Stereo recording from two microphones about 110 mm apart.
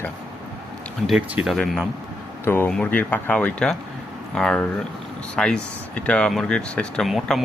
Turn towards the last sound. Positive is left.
turn(degrees=0)  # may be behind; listen again after turning